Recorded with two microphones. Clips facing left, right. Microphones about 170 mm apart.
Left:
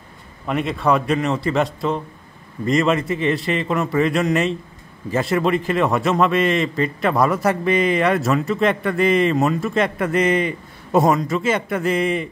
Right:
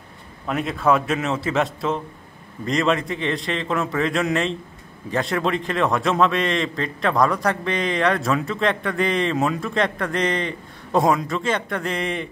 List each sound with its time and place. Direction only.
0.5 s a man's voice: centre (ahead or behind)